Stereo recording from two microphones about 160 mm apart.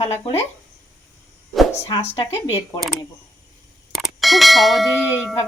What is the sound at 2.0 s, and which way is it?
Speech, 45° left (ahead or behind).